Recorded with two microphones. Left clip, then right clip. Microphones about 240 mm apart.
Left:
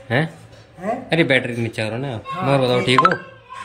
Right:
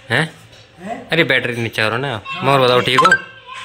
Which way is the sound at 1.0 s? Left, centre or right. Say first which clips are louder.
Right 3 dB; centre.